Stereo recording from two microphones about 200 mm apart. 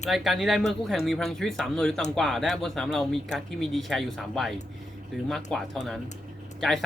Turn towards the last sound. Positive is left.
turn(degrees=0)  # may be behind; listen again after turning